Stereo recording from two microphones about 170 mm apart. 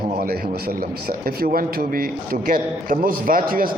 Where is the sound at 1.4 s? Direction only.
55° right (ahead or behind).